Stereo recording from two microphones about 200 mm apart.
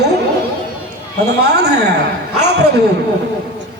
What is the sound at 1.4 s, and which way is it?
Speech, 55° right (ahead or behind).